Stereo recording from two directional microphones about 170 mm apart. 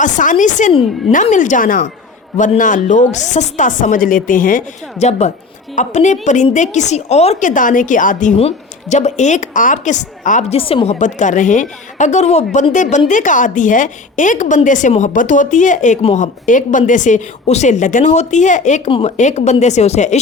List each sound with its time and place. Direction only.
0.0 s a woman's voice: 50° left (ahead or behind)
8.4 s a woman's voice: 40° left (ahead or behind)
10.6 s a woman's voice: 35° left (ahead or behind)
18.9 s speech: 30° left (ahead or behind)
19.1 s a woman's voice: 45° left (ahead or behind)